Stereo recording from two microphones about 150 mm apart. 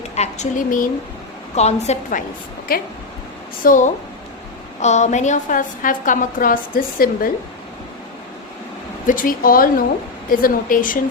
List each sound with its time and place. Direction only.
0.2 s a woman's voice: 55° left (ahead or behind)
1.5 s a woman's voice: 45° left (ahead or behind)
2.7 s speech: 75° left (ahead or behind)
3.6 s a woman's voice: 60° left (ahead or behind)
4.8 s a woman's voice: 50° left (ahead or behind); by 7.3 s 70° left (ahead or behind)
9.0 s a woman's voice: 70° left (ahead or behind)